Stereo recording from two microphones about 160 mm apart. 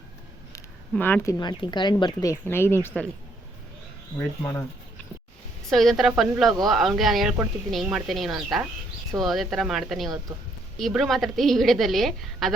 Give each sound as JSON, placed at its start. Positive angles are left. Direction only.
{"t": 0.5, "sound": "speech", "side_deg": 10}
{"t": 4.2, "sound": "speech", "side_deg": 20}
{"t": 5.7, "sound": "a woman's voice", "side_deg": 0}